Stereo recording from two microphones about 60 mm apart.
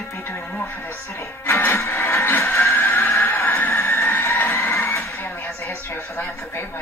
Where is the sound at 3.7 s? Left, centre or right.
Left.